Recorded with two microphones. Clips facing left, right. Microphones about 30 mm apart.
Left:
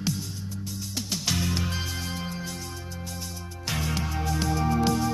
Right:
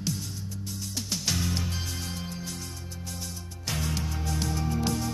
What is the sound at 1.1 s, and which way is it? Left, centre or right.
Music, centre.